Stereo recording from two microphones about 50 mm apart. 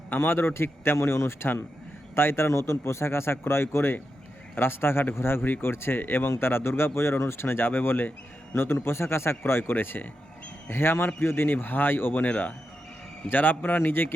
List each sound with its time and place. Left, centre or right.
0.2 s a man's voice: left